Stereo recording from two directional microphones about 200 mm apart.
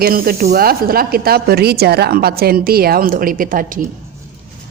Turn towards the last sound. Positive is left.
turn(degrees=-45)  # may be behind; listen again after turning